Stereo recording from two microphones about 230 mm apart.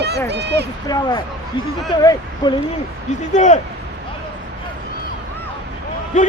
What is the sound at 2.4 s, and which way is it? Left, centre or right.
Speech, centre.